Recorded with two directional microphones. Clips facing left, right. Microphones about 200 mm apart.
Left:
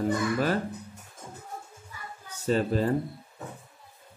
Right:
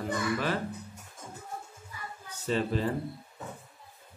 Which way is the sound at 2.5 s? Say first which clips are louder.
Left 4 dB; 45° left (ahead or behind).